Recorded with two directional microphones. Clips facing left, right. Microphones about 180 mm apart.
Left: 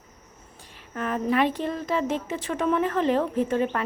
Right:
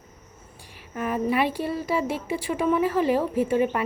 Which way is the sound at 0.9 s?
10° right (ahead or behind).